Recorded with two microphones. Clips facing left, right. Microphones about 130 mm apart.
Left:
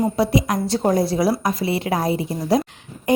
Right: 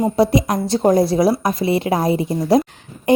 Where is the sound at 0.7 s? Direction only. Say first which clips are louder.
Right 5 dB; 20° right (ahead or behind).